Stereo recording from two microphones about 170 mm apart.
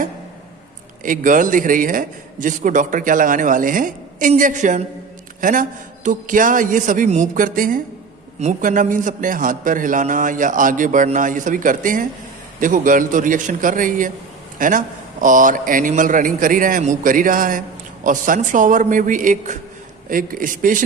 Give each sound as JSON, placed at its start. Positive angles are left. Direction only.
{"t": 1.0, "sound": "a man's voice", "side_deg": -50}